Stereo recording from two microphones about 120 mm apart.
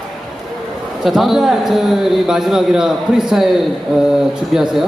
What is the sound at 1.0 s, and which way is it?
A man's voice, centre (ahead or behind).